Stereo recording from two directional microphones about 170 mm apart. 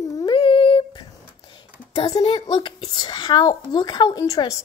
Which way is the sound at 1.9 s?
25° left (ahead or behind).